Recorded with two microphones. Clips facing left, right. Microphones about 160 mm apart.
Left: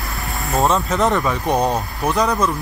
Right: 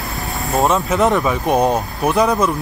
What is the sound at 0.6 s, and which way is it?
Speech, centre (ahead or behind).